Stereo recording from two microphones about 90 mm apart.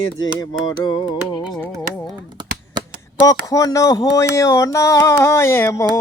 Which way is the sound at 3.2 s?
40° left (ahead or behind).